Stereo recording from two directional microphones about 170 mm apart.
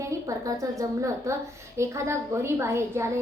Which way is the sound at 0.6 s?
20° right (ahead or behind).